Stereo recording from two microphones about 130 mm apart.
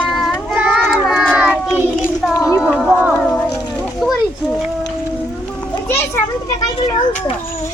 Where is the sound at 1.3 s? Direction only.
10° right (ahead or behind).